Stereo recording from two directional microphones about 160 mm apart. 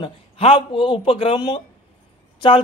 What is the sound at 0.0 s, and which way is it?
Speech, 35° left (ahead or behind).